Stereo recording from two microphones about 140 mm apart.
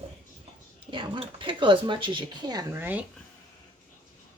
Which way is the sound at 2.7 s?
15° right (ahead or behind).